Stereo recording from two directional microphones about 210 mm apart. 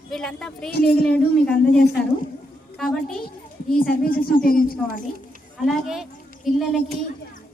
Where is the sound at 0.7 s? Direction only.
45° left (ahead or behind).